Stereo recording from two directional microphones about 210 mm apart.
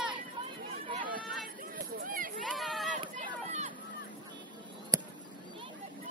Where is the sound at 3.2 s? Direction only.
35° right (ahead or behind).